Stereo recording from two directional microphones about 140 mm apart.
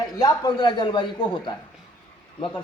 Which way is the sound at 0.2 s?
30° left (ahead or behind).